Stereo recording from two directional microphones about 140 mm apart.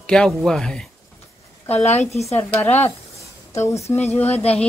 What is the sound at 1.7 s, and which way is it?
Speech, 50° left (ahead or behind).